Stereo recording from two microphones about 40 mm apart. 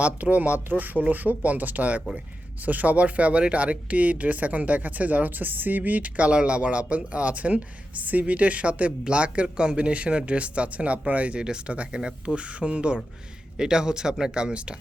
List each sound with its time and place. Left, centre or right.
0.0 s speech: right